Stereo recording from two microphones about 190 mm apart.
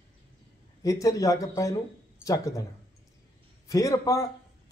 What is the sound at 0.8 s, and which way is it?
Speech, 15° left (ahead or behind).